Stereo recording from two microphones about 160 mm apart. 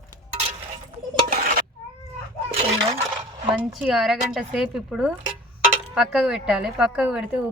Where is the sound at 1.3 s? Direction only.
65° right (ahead or behind).